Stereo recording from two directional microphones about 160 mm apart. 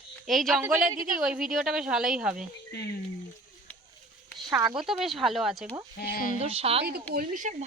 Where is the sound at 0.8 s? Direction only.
55° right (ahead or behind).